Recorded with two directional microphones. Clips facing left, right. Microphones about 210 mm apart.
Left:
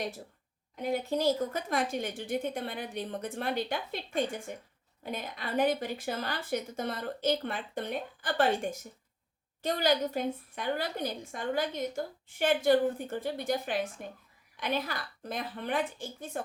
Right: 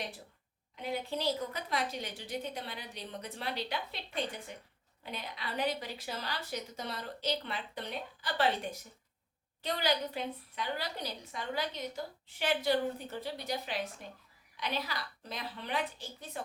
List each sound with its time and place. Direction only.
0.8 s a woman's voice: 45° left (ahead or behind)